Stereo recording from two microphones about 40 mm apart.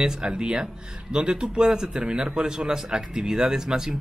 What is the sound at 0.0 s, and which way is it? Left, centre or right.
Speech, centre.